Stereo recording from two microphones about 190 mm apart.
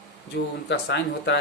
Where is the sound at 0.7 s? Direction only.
65° left (ahead or behind).